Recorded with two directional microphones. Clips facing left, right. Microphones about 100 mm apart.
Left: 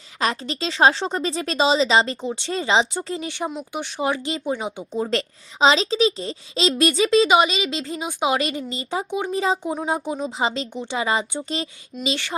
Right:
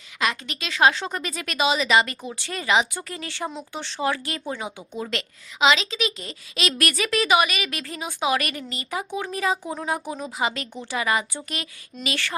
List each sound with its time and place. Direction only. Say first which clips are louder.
0.2 s speech: left 3 dB; 35° left (ahead or behind)
4.9 s speech: left 7 dB; 35° left (ahead or behind)